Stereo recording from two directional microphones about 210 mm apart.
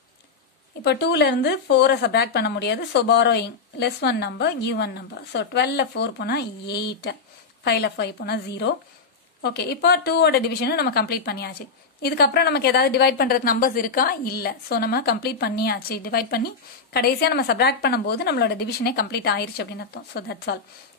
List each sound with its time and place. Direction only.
0.8 s a woman's voice: 50° left (ahead or behind)